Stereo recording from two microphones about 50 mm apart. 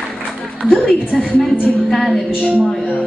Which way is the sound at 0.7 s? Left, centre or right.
Left.